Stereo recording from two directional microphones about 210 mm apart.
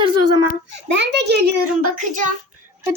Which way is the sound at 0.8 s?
55° right (ahead or behind).